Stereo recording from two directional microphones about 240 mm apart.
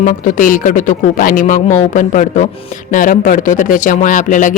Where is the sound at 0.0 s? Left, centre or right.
Left.